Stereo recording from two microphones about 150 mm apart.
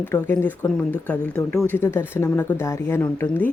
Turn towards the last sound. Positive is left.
turn(degrees=10)  # may be behind; listen again after turning